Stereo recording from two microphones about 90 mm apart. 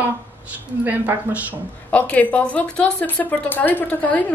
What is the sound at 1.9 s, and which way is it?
A woman's voice, 15° left (ahead or behind).